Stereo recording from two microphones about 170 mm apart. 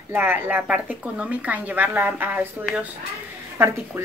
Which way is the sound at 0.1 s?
10° right (ahead or behind).